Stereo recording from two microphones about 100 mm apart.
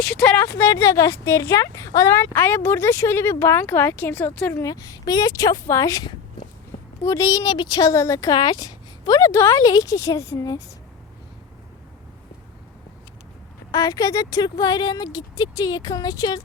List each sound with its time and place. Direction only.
0.2 s a woman's voice: 15° left (ahead or behind)
4.6 s speech: 35° left (ahead or behind)
9.6 s speech: 35° left (ahead or behind)
13.7 s speech: 40° left (ahead or behind)